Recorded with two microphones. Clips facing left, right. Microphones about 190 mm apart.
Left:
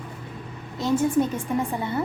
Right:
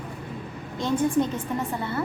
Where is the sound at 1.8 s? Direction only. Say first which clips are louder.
Left 2 dB; 20° left (ahead or behind).